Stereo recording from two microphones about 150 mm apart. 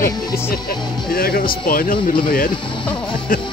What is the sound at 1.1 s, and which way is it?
Speech, 80° left.